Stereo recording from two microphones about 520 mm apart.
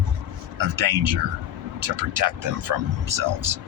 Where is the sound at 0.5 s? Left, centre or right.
Right.